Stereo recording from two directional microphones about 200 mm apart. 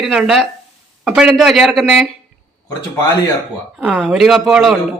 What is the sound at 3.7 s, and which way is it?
Speech, centre (ahead or behind).